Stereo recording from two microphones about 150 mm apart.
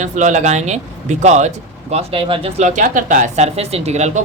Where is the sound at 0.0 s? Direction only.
55° right (ahead or behind); by 2.6 s 35° right (ahead or behind).